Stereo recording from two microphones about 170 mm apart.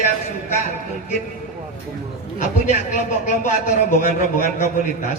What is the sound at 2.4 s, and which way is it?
A man's voice, 45° left (ahead or behind).